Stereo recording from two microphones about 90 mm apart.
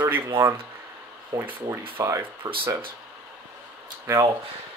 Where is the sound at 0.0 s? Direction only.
25° right (ahead or behind).